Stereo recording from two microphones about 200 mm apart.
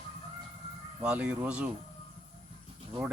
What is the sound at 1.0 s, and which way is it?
Speech, 5° right (ahead or behind).